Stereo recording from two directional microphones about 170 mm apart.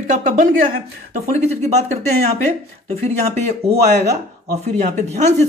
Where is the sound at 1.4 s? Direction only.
40° right (ahead or behind).